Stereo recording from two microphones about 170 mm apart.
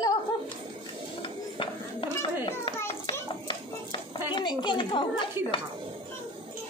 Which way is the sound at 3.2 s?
30° left (ahead or behind).